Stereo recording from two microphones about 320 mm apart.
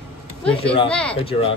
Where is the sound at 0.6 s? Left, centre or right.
Centre.